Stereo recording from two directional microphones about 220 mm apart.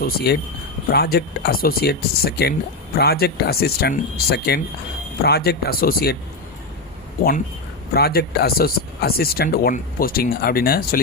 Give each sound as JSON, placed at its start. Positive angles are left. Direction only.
{"t": 0.0, "sound": "speech", "side_deg": 45}
{"t": 7.2, "sound": "speech", "side_deg": 40}